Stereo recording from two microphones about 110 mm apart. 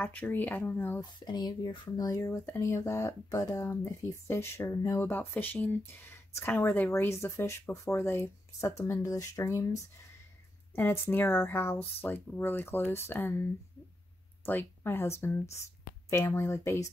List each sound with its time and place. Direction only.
0.0 s speech: 15° left (ahead or behind)
1.2 s speech: 40° left (ahead or behind)